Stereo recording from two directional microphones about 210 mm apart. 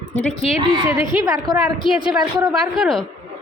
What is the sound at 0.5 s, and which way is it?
Speech, 20° right (ahead or behind).